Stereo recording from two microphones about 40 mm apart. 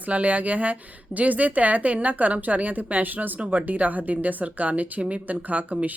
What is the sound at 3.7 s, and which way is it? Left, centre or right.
A woman's voice, right.